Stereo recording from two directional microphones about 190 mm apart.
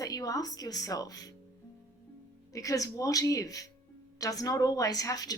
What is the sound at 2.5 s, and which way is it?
Speech, 20° left (ahead or behind).